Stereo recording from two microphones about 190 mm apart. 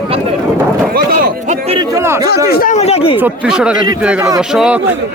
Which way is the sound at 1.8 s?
15° right (ahead or behind).